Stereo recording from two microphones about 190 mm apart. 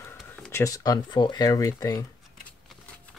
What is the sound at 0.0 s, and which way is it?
Speech, 15° left (ahead or behind).